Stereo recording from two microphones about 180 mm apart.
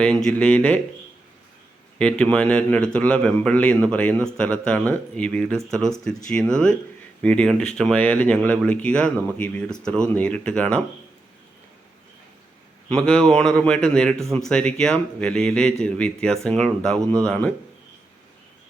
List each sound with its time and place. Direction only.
0.3 s a man's voice: 5° left (ahead or behind)
2.0 s a man's voice: 5° left (ahead or behind)
12.9 s speech: 5° left (ahead or behind)
17.0 s speech: 15° right (ahead or behind)
17.2 s speech: 5° left (ahead or behind)